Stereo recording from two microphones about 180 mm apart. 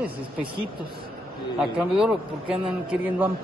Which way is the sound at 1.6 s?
5° right (ahead or behind).